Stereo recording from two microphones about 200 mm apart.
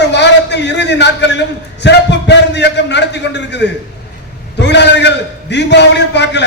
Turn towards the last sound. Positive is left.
turn(degrees=60)  # may be behind; listen again after turning